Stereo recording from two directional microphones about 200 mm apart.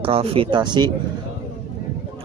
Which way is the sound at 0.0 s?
30° right (ahead or behind).